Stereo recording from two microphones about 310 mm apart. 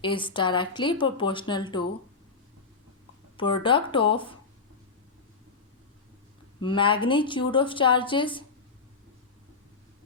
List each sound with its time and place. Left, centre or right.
0.0 s speech: centre
3.3 s speech: centre
6.6 s speech: centre